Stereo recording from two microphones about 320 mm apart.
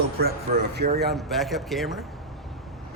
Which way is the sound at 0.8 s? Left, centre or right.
Right.